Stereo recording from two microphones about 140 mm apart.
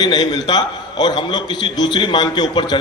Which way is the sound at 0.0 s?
30° left (ahead or behind).